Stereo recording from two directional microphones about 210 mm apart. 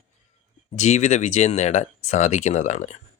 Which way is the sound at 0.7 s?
35° left (ahead or behind).